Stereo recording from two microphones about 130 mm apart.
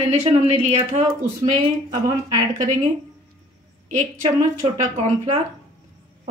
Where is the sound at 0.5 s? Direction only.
65° right (ahead or behind).